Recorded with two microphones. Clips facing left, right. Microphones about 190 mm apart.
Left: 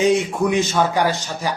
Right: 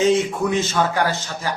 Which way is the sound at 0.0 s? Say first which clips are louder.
Left 1 dB; 15° left (ahead or behind).